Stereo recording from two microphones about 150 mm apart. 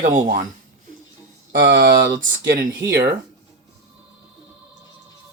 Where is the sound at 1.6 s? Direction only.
70° right (ahead or behind).